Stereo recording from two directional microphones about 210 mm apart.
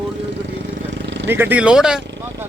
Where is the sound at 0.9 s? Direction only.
55° right (ahead or behind).